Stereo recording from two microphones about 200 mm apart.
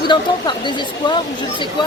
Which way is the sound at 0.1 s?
25° left (ahead or behind).